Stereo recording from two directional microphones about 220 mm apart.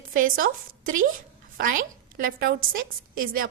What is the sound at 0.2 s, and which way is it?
Speech, 40° right (ahead or behind).